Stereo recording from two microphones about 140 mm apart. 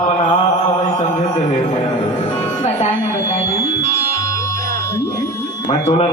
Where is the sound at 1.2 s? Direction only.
55° left (ahead or behind).